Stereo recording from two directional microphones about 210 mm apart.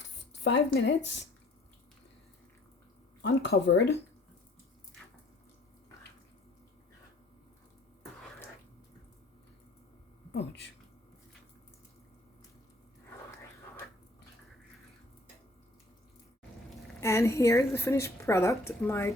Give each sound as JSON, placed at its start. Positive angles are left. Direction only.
{"t": 0.4, "sound": "speech", "side_deg": 55}
{"t": 3.2, "sound": "speech", "side_deg": 55}
{"t": 10.3, "sound": "speech", "side_deg": 55}
{"t": 17.0, "sound": "a woman's voice", "side_deg": 15}